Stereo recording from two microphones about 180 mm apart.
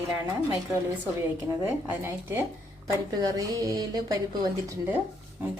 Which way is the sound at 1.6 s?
10° right (ahead or behind).